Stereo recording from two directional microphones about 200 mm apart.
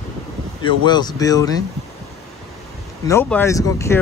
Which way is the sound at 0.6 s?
20° left (ahead or behind).